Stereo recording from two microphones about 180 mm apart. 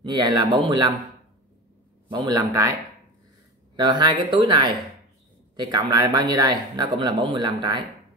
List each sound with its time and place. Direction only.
0.0 s speech: 25° right (ahead or behind)
2.0 s speech: 20° right (ahead or behind)
3.7 s speech: 25° right (ahead or behind)